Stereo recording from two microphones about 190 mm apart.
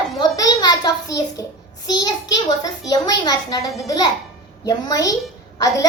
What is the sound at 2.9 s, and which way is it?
A woman's voice, 20° left (ahead or behind).